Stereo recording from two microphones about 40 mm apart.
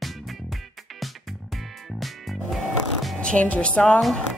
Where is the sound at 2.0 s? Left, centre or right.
Centre.